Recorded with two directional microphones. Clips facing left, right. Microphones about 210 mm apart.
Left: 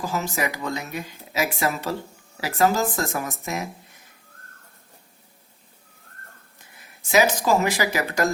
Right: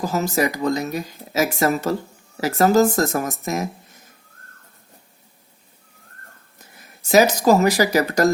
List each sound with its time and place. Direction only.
0.0 s speech: 40° right (ahead or behind)
6.8 s speech: 40° right (ahead or behind)